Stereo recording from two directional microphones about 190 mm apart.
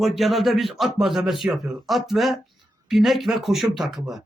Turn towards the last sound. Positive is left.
turn(degrees=0)  # may be behind; listen again after turning